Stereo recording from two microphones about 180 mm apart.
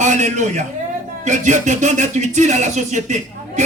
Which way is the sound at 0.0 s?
40° right (ahead or behind).